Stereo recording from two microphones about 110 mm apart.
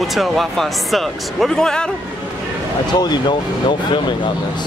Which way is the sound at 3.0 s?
45° left (ahead or behind).